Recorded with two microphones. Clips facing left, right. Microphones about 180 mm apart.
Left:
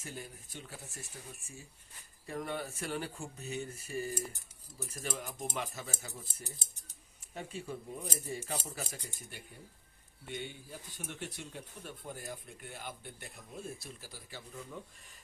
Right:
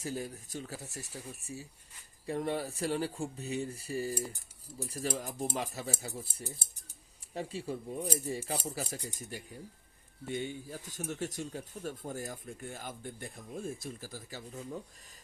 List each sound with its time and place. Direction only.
0.0 s speech: 40° right (ahead or behind)
10.2 s speech: 45° right (ahead or behind)